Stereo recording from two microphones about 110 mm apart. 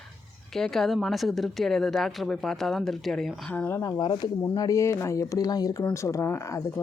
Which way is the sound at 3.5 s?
15° left (ahead or behind).